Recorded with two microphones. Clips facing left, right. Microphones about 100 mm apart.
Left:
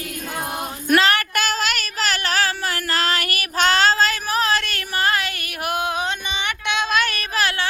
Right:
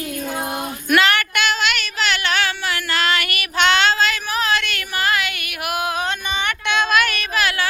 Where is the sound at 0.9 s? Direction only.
35° left (ahead or behind).